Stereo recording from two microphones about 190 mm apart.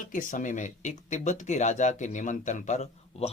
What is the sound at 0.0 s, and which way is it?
Speech, 45° left (ahead or behind).